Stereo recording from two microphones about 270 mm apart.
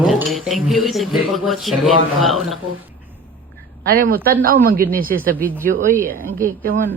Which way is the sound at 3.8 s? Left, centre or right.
Right.